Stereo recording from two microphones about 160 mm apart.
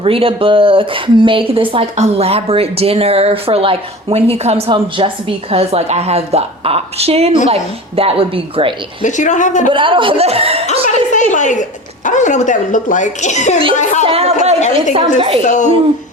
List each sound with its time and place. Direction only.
0.0 s speech: 35° right (ahead or behind)
9.0 s speech: 50° left (ahead or behind)
9.7 s speech: 30° right (ahead or behind)
10.7 s a sound: 50° left (ahead or behind)
12.0 s speech: 50° left (ahead or behind)
14.0 s speech: 40° right (ahead or behind)
15.4 s speech: 50° left (ahead or behind)